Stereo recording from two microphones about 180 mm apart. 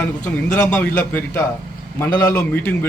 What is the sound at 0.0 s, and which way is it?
A man's voice, 5° left (ahead or behind).